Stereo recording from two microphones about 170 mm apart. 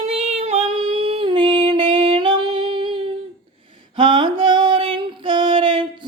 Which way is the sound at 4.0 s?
30° right (ahead or behind).